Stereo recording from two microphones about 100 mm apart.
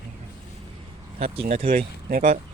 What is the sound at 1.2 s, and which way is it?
Speech, 90° right.